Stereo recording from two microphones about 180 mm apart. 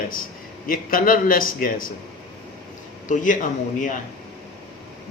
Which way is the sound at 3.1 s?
45° left (ahead or behind).